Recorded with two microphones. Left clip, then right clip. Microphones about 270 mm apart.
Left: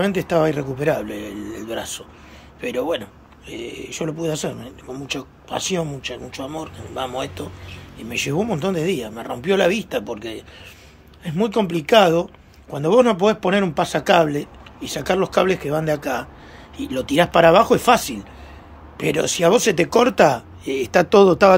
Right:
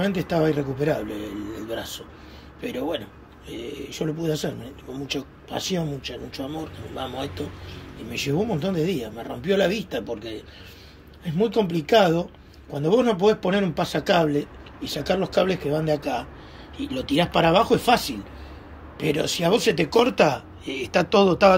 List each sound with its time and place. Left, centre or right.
0.0 s speech: centre